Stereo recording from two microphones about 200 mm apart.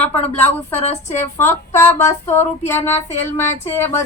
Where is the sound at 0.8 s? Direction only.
35° left (ahead or behind).